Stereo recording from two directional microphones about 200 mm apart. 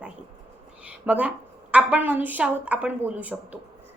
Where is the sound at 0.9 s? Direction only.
5° right (ahead or behind).